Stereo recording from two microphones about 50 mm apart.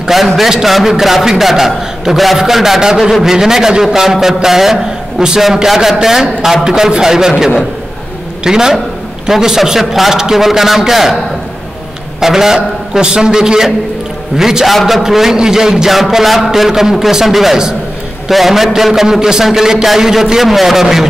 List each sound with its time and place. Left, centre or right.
0.4 s a man's voice: centre
12.2 s a man's voice: centre
14.7 s a man's voice: centre